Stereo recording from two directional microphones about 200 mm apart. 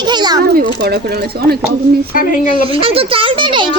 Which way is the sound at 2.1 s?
40° left (ahead or behind).